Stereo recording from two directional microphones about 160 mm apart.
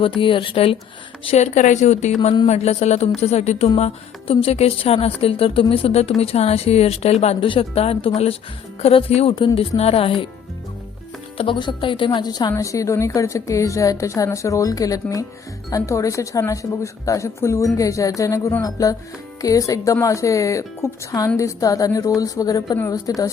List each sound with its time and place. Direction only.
0.0 s speech: 35° left (ahead or behind)
11.3 s speech: 30° left (ahead or behind)